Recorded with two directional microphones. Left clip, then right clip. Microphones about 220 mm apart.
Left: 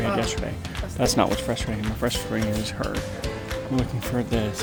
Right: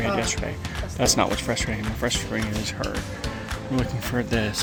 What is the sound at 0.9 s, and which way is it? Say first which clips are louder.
Speech: even; 10° left (ahead or behind).